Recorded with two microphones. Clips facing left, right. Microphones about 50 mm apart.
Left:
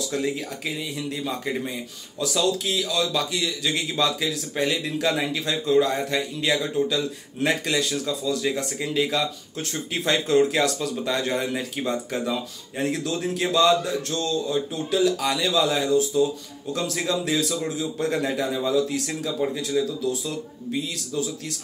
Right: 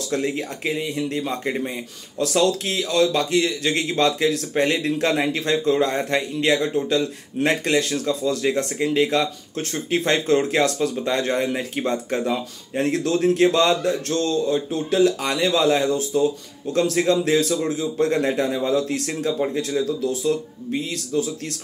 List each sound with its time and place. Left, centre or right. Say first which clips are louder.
0.1 s speech: right 6 dB; right
2.1 s speech: right 4 dB; right
19.7 s speech: even; right
20.1 s speech: right 5 dB; right